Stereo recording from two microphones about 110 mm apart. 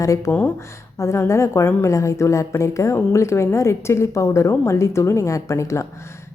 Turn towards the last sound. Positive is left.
turn(degrees=25)  # may be behind; listen again after turning